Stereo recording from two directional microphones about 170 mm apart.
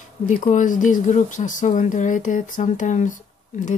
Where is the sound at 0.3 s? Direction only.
45° left (ahead or behind).